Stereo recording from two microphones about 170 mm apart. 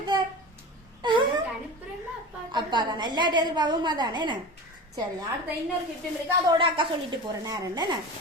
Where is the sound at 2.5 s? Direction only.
25° right (ahead or behind).